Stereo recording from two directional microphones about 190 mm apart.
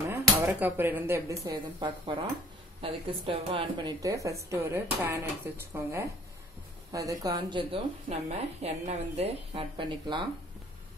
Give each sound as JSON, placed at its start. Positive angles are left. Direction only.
{"t": 0.1, "sound": "a woman's voice", "side_deg": -10}